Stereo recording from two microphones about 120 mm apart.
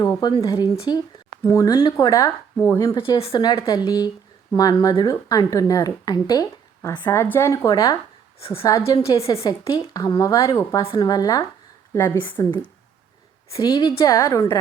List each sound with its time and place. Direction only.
0.0 s speech: 35° left (ahead or behind)
3.2 s a woman's voice: 50° left (ahead or behind)
3.4 s speech: 35° left (ahead or behind)
7.1 s speech: 20° left (ahead or behind)
8.4 s a woman's voice: 50° left (ahead or behind)
9.5 s speech: 35° left (ahead or behind)
10.8 s speech: 40° left (ahead or behind)